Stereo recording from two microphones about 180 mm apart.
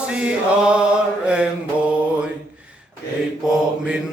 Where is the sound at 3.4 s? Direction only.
5° right (ahead or behind).